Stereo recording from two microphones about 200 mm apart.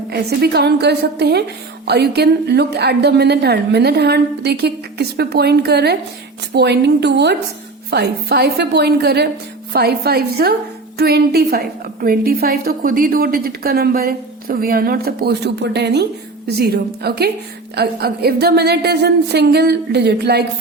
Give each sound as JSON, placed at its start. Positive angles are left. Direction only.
{"t": 0.1, "sound": "a woman's voice", "side_deg": -55}